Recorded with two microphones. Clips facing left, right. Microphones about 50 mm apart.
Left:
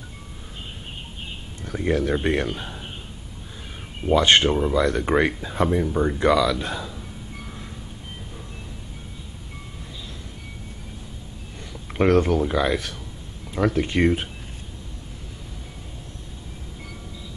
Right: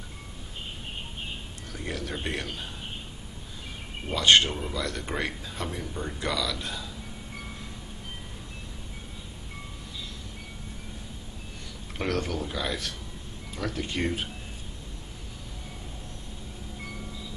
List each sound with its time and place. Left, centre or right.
1.7 s speech: left
4.1 s speech: left
12.0 s speech: left